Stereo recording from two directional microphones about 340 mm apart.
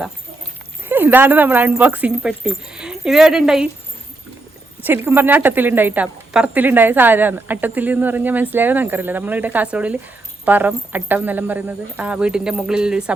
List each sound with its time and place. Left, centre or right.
0.9 s speech: centre
4.8 s speech: centre